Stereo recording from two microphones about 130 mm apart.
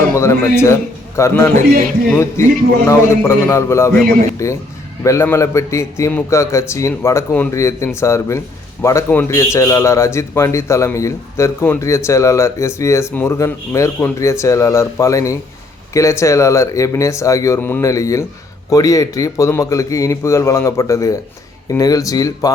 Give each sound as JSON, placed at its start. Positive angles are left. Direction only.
{"t": 0.1, "sound": "a man's voice", "side_deg": 20}